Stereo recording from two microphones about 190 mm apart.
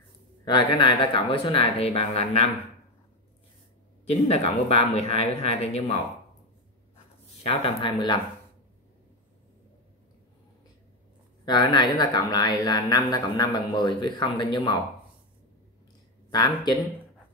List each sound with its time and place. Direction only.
0.5 s speech: 25° left (ahead or behind)
4.1 s speech: 35° left (ahead or behind)
7.4 s speech: 25° left (ahead or behind)
11.4 s speech: 20° left (ahead or behind)
16.3 s speech: 20° left (ahead or behind)